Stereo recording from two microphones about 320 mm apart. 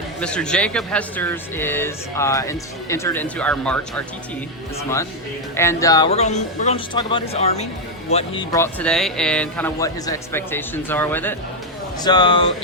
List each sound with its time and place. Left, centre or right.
0.2 s speech: centre
5.5 s speech: centre